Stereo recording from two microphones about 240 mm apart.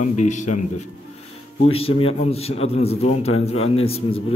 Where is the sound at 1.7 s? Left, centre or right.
Left.